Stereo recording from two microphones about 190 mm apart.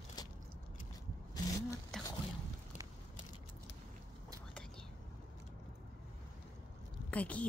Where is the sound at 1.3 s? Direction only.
20° left (ahead or behind).